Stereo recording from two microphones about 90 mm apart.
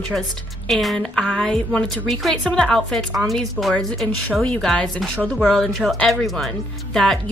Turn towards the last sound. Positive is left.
turn(degrees=5)  # may be behind; listen again after turning